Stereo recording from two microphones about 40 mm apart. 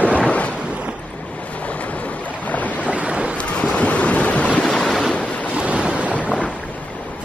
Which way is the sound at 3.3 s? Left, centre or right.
Left.